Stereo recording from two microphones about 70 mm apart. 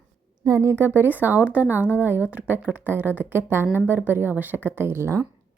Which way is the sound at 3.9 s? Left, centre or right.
Right.